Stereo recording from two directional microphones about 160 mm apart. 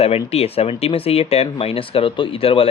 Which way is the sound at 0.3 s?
40° left (ahead or behind).